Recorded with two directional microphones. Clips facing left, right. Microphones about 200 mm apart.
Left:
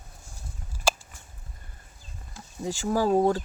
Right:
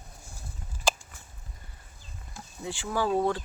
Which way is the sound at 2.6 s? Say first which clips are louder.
Left 5 dB; 40° left (ahead or behind).